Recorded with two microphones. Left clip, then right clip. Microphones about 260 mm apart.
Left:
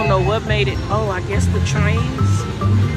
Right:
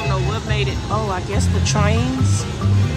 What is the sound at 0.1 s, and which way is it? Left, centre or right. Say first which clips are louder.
Speech: left 6 dB; centre.